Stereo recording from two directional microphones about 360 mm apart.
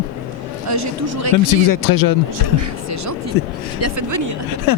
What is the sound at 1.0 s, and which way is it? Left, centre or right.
Speech, right.